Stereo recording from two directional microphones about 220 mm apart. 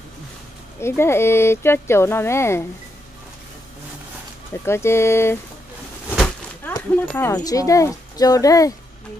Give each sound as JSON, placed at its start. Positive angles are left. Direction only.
{"t": 0.7, "sound": "speech", "side_deg": 10}
{"t": 4.6, "sound": "speech", "side_deg": 10}
{"t": 6.1, "sound": "a sound", "side_deg": 5}
{"t": 6.7, "sound": "speech", "side_deg": 10}